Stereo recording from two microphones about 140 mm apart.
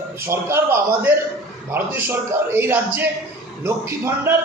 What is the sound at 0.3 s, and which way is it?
A man's voice, 15° right (ahead or behind).